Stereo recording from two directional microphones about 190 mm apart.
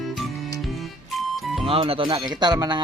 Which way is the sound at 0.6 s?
Centre (ahead or behind).